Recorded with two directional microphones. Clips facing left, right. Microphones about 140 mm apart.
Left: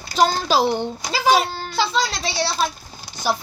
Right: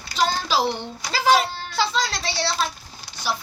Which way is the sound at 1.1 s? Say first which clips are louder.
Left 1 dB; 15° left (ahead or behind).